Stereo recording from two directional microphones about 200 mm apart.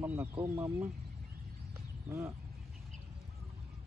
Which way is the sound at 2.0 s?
10° right (ahead or behind).